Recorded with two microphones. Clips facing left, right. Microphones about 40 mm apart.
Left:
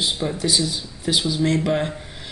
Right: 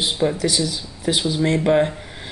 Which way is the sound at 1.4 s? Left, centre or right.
Right.